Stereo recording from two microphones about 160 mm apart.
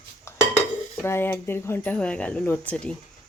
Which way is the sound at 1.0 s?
15° left (ahead or behind).